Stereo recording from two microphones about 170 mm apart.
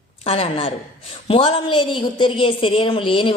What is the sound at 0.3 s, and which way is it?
A woman's voice, 35° left (ahead or behind).